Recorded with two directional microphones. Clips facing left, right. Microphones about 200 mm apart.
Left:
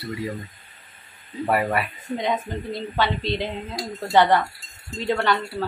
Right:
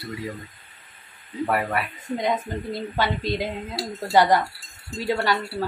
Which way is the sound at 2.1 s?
10° right (ahead or behind).